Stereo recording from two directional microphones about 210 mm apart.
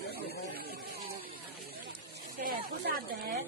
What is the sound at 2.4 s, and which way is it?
Snake, 40° right (ahead or behind).